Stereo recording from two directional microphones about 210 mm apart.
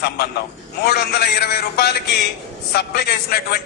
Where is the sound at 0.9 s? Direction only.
50° left (ahead or behind).